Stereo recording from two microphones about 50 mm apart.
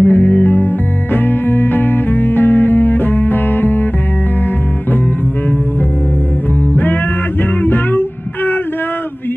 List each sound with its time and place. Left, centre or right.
0.0 s music: left
6.7 s music: left